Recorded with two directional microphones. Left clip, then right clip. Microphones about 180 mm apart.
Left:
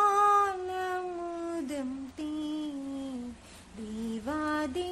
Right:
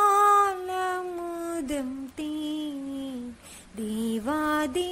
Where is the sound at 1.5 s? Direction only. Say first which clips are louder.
Right 4 dB; 20° right (ahead or behind).